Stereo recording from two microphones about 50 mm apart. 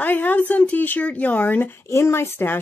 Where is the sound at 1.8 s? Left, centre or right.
Left.